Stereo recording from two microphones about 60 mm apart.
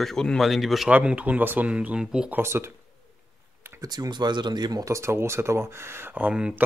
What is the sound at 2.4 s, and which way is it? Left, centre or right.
Speech, right.